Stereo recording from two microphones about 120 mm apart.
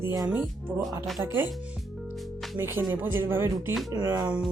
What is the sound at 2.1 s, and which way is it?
Music, centre (ahead or behind).